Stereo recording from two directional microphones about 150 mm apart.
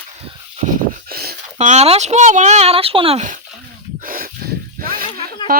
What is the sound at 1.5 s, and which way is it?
Speech, 50° right (ahead or behind).